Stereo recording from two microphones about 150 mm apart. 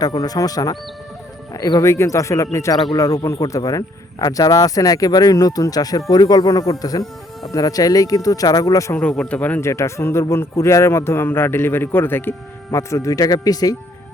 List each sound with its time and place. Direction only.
0.0 s speech: 25° left (ahead or behind)
9.0 s speech: 5° left (ahead or behind); by 13.7 s 25° left (ahead or behind)